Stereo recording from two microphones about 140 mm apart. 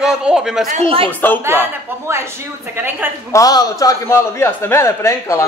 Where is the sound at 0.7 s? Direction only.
50° right (ahead or behind).